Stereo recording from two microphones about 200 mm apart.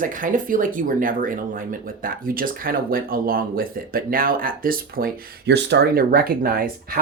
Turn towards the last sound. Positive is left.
turn(degrees=-45)  # may be behind; listen again after turning